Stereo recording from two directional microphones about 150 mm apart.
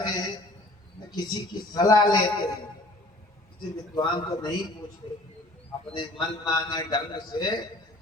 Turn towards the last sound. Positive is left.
turn(degrees=30)  # may be behind; listen again after turning